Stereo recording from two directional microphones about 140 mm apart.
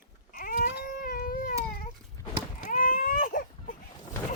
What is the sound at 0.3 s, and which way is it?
Baby cry, 85° left.